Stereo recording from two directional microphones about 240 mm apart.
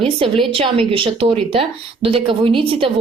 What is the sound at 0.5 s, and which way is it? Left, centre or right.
A woman's voice, right.